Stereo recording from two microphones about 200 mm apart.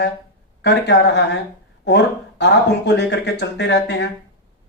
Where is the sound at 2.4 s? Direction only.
60° left (ahead or behind).